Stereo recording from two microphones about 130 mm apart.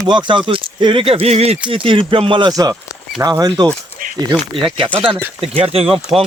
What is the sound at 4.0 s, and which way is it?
Dog, 90° right.